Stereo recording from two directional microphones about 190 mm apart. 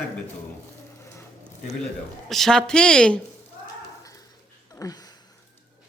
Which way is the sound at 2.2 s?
Centre (ahead or behind).